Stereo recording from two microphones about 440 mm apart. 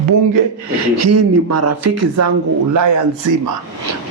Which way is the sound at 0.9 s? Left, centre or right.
Right.